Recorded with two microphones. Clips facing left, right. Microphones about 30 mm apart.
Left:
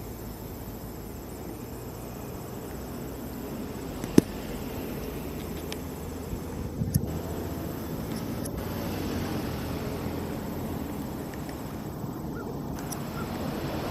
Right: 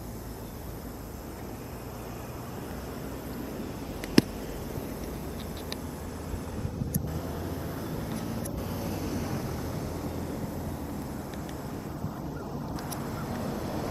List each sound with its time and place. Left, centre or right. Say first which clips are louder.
3.4 s vehicle: left 1 dB; centre
4.0 s a sound: left 2 dB; right
7.1 s vehicle: left 1 dB; centre
8.5 s vehicle: left 1 dB; centre; by 10.5 s left
13.0 s vehicle: left 1 dB; centre
13.4 s vehicle: left 1 dB; left